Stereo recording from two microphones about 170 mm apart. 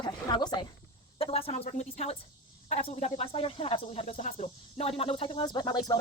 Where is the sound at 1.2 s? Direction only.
35° left (ahead or behind).